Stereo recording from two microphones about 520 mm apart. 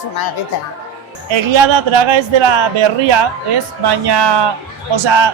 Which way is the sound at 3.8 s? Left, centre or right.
Right.